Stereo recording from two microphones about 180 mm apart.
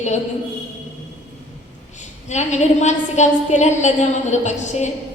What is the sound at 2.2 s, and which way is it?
A woman's voice, 40° left (ahead or behind).